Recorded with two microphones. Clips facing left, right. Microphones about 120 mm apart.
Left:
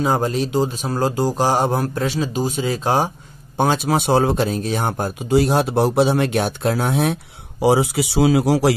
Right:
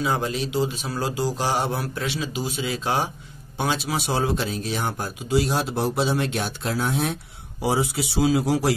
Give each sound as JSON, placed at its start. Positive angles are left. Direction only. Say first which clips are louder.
{"t": 0.0, "sound": "speech", "louder": "left 5 dB", "side_deg": 40}
{"t": 7.6, "sound": "speech", "louder": "left 7 dB", "side_deg": 70}